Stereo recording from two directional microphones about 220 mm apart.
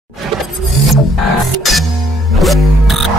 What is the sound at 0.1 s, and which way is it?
Music, centre (ahead or behind).